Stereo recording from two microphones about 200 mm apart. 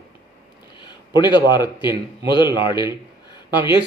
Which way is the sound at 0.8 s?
20° left (ahead or behind).